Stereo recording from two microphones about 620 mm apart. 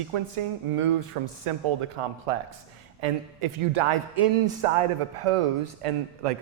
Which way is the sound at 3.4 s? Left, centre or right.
Right.